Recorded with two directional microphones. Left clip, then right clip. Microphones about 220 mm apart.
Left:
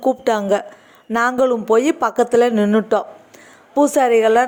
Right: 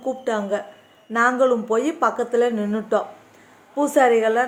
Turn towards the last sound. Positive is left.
turn(degrees=40)  # may be behind; listen again after turning